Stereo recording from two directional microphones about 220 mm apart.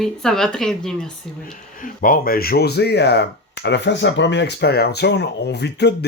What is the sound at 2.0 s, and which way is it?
Speech, 40° left (ahead or behind).